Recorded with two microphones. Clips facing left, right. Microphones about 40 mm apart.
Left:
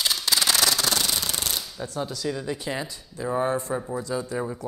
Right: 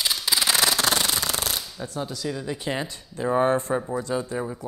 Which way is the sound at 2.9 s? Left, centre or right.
Right.